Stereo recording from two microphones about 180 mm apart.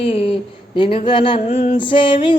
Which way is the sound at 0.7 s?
30° left (ahead or behind).